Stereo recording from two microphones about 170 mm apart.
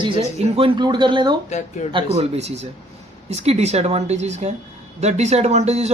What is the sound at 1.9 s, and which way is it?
Speech, 35° right (ahead or behind).